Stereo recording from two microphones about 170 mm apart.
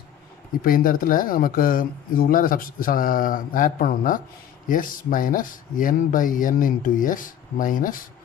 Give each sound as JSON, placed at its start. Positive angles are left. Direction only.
{"t": 0.6, "sound": "speech", "side_deg": 55}